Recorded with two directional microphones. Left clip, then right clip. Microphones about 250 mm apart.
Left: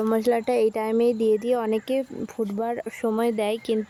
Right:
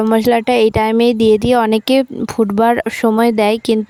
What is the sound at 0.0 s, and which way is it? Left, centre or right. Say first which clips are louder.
A woman's voice: right 9 dB; right.